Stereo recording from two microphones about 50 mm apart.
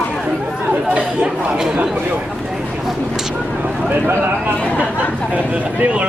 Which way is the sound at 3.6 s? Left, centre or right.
Right.